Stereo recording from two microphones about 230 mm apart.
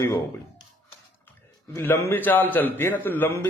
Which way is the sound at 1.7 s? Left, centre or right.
Centre.